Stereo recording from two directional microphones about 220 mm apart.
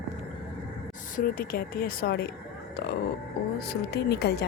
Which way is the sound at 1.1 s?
40° left (ahead or behind).